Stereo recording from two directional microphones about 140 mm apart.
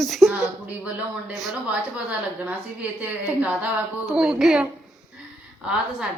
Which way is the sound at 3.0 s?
10° right (ahead or behind).